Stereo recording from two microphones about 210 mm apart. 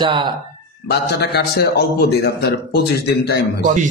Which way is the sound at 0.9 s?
50° left (ahead or behind).